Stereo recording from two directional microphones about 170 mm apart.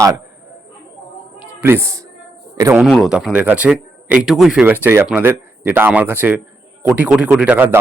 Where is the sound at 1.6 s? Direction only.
15° right (ahead or behind).